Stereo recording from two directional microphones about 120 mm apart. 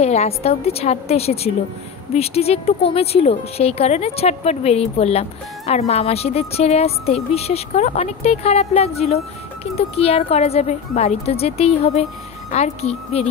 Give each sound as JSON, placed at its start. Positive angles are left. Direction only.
{"t": 0.0, "sound": "speech", "side_deg": 65}